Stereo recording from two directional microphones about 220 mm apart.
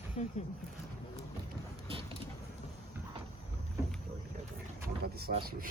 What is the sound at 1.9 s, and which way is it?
Vehicle, 25° right (ahead or behind).